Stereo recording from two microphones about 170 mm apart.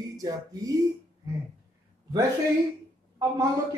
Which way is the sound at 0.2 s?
20° right (ahead or behind).